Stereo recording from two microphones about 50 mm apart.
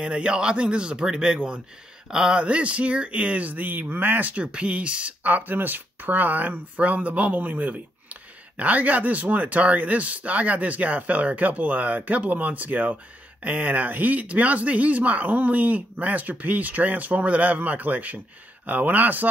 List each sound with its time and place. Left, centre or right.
0.0 s speech: centre
5.2 s speech: right